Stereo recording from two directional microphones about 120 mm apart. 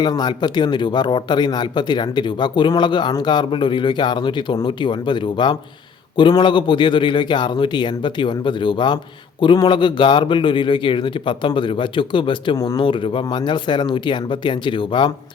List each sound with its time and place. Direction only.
0.0 s a man's voice: 35° left (ahead or behind)
12.5 s speech: 30° left (ahead or behind)
12.8 s a man's voice: 45° left (ahead or behind)